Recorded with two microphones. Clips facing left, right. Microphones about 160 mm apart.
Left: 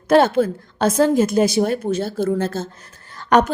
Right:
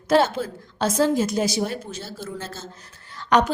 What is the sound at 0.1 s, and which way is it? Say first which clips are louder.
A woman's voice: left 5 dB; 55° left (ahead or behind).